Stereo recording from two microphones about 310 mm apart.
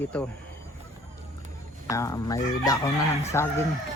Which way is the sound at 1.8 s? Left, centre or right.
Centre.